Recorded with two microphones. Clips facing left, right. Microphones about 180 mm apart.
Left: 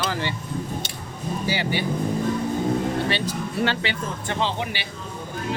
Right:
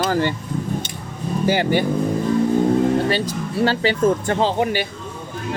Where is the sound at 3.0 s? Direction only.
40° right (ahead or behind).